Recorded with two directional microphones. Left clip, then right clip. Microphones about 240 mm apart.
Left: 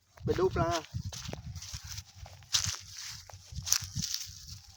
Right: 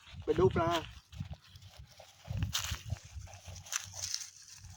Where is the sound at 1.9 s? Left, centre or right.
Centre.